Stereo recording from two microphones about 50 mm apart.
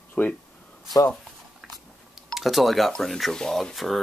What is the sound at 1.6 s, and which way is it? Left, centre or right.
Chewing, centre.